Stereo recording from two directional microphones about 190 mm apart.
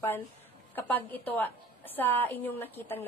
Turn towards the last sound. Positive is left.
turn(degrees=10)  # may be behind; listen again after turning